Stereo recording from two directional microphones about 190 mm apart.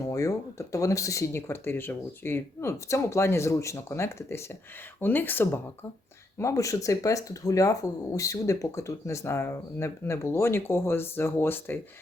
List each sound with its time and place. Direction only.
0.0 s speech: 15° left (ahead or behind)